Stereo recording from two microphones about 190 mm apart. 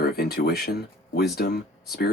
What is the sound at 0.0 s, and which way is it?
Speech, 55° left (ahead or behind).